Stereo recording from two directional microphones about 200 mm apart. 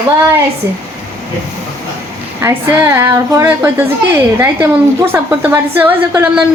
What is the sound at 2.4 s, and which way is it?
A woman's voice, 15° right (ahead or behind).